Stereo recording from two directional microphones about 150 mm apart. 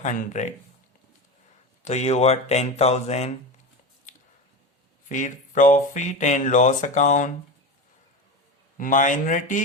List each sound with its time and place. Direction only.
0.0 s speech: 55° left (ahead or behind)
1.8 s speech: 50° left (ahead or behind)
5.0 s speech: 55° left (ahead or behind)
8.8 s speech: 60° left (ahead or behind)